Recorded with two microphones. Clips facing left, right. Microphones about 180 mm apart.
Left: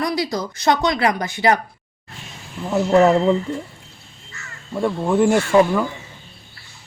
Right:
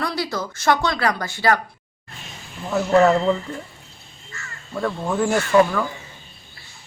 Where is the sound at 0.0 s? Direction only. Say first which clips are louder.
Left 3 dB; 15° left (ahead or behind).